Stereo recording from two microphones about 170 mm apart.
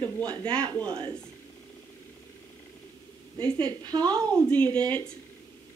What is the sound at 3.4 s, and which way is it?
Speech, 25° right (ahead or behind).